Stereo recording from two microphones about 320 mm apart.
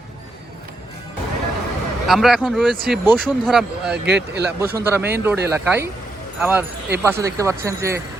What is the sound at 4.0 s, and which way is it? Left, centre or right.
Speech, right.